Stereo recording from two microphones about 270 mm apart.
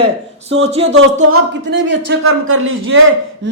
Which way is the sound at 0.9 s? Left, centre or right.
Right.